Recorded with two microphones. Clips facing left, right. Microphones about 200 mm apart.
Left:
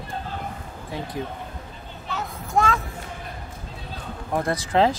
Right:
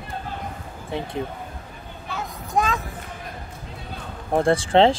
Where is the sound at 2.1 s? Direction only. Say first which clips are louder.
Even; 15° right (ahead or behind).